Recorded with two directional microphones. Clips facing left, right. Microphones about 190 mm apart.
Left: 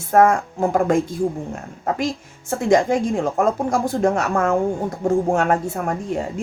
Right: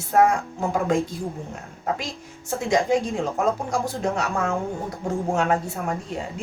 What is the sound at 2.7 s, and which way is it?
Speech, 55° left (ahead or behind).